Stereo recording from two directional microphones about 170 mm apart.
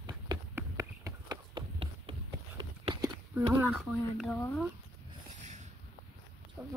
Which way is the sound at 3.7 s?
Centre (ahead or behind).